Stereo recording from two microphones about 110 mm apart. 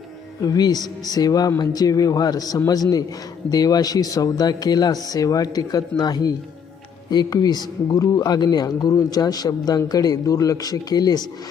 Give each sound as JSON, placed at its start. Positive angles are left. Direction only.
{"t": 0.4, "sound": "speech", "side_deg": 35}